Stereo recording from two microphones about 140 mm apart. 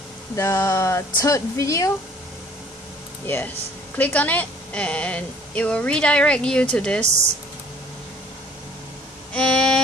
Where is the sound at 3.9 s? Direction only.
10° left (ahead or behind).